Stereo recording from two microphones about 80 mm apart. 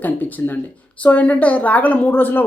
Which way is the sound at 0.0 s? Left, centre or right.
Left.